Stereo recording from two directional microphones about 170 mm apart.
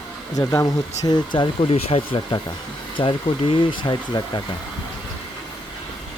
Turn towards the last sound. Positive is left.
turn(degrees=25)  # may be behind; listen again after turning